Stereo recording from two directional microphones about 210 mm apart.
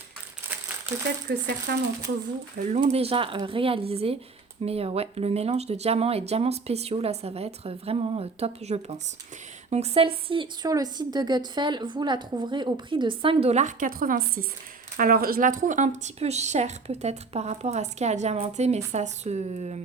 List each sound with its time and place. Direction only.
1.3 s speech: 50° right (ahead or behind)
2.7 s a woman's voice: 30° right (ahead or behind)